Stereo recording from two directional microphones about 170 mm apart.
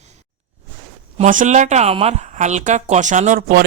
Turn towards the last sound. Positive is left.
turn(degrees=-60)  # may be behind; listen again after turning